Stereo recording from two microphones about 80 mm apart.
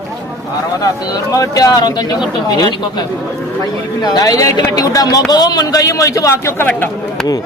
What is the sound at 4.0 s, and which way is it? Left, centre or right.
Speech, left.